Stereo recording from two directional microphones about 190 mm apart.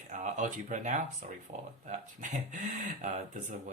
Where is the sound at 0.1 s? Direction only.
40° right (ahead or behind).